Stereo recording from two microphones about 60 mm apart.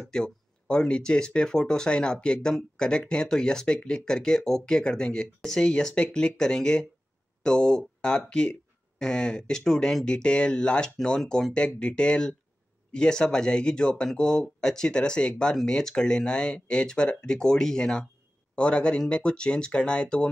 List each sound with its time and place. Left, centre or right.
0.1 s speech: centre